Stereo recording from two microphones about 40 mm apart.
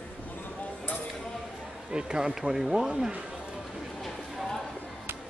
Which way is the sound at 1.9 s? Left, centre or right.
Centre.